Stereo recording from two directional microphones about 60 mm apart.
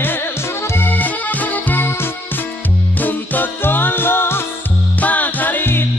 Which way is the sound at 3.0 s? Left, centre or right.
Left.